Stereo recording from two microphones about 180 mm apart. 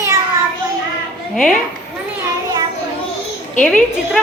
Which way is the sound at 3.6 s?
5° left (ahead or behind).